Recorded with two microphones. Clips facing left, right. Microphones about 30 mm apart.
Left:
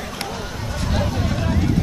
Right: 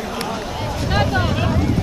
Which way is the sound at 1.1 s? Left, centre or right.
Right.